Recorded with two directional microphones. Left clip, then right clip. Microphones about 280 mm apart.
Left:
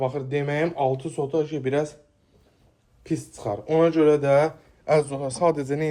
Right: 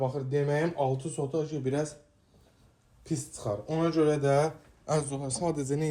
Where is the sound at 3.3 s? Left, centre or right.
Left.